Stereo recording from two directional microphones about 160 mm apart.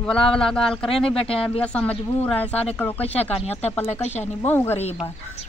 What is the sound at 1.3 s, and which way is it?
Speech, 35° left (ahead or behind).